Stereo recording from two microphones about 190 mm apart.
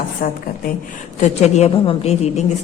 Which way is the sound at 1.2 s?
35° left (ahead or behind).